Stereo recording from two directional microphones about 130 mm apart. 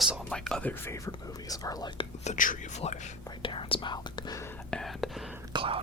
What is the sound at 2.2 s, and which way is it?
Speech, 75° left (ahead or behind).